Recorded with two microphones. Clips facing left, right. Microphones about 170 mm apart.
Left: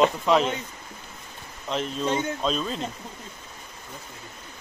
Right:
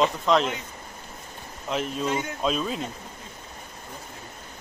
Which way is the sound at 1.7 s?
5° right (ahead or behind).